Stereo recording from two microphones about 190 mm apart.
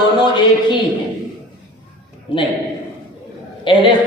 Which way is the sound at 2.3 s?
25° left (ahead or behind).